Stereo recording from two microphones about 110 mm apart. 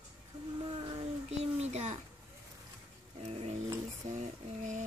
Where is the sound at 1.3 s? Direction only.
80° right.